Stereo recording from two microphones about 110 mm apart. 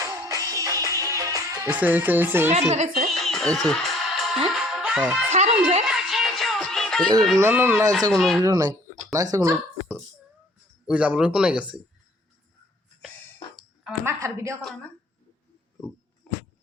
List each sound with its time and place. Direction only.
0.0 s music: 30° right (ahead or behind)
1.7 s speech: 15° right (ahead or behind)
2.5 s a woman's voice: 90° right
3.1 s music: 5° left (ahead or behind)
5.3 s a sound: 85° right
5.9 s music: 5° right (ahead or behind)
7.5 s speech: 15° right (ahead or behind)
8.1 s speech: 5° left (ahead or behind)
8.4 s speech: 30° right (ahead or behind)
10.8 s speech: 10° right (ahead or behind)
14.0 s a sound: 25° right (ahead or behind)
16.3 s a sound: 5° left (ahead or behind)